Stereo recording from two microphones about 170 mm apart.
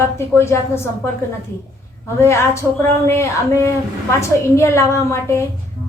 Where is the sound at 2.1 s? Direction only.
15° left (ahead or behind).